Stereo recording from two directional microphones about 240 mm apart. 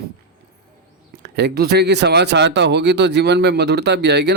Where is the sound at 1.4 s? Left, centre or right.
Right.